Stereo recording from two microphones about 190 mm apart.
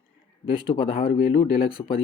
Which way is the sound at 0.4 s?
30° left (ahead or behind).